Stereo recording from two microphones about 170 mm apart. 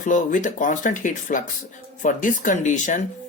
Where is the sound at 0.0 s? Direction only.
50° left (ahead or behind).